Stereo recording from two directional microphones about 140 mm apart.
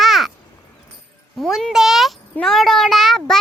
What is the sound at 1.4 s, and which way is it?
A child's voice, centre (ahead or behind).